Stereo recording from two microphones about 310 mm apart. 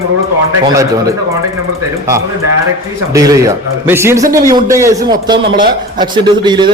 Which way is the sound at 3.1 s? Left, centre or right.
Centre.